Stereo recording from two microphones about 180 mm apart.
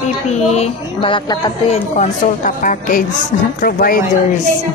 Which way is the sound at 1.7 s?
40° left (ahead or behind).